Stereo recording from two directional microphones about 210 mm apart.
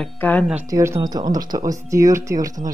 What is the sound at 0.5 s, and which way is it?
Speech, 15° right (ahead or behind).